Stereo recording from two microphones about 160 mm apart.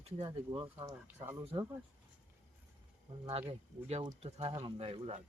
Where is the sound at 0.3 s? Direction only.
25° right (ahead or behind).